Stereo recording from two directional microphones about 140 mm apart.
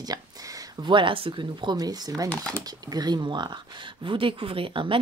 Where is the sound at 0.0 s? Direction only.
25° right (ahead or behind).